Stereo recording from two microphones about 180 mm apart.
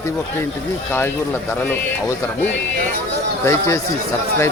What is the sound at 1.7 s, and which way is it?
Speech, 10° left (ahead or behind).